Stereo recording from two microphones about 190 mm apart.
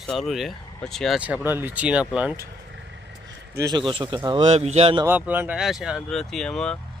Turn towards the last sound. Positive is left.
turn(degrees=5)  # may be behind; listen again after turning